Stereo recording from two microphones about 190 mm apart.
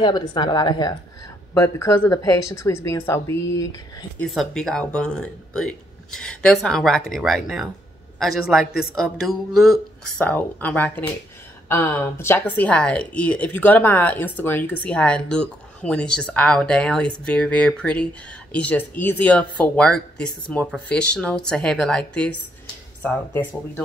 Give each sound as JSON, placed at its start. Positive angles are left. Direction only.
{"t": 0.0, "sound": "a woman's voice", "side_deg": 20}
{"t": 4.2, "sound": "speech", "side_deg": 0}